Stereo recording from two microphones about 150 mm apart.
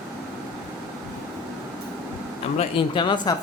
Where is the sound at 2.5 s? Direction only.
35° left (ahead or behind).